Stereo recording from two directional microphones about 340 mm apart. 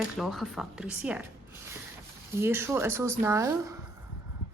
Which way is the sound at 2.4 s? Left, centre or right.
Centre.